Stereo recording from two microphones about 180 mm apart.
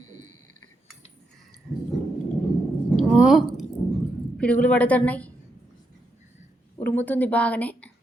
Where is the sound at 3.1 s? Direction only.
5° right (ahead or behind).